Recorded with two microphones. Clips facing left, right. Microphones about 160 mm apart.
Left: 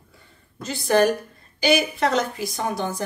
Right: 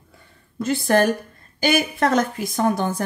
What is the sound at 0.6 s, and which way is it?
A woman's voice, 50° right (ahead or behind).